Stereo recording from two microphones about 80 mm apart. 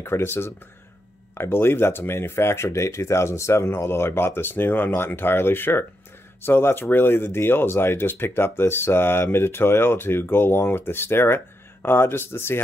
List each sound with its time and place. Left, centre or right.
0.0 s speech: left